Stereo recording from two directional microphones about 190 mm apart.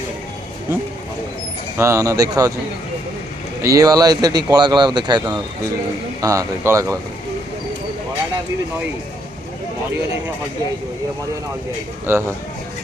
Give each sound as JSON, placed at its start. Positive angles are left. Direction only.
{"t": 1.8, "sound": "speech", "side_deg": -15}
{"t": 3.6, "sound": "speech", "side_deg": -15}
{"t": 12.0, "sound": "speech", "side_deg": -15}